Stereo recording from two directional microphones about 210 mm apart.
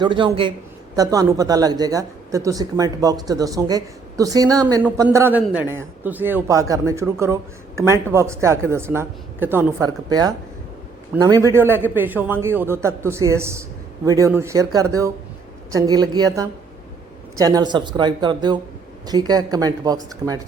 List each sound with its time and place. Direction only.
0.0 s speech: 25° right (ahead or behind)